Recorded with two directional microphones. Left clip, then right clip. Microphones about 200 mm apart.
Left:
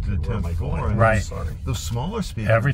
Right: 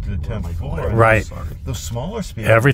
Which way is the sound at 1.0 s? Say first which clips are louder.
Right 6 dB; 70° right (ahead or behind).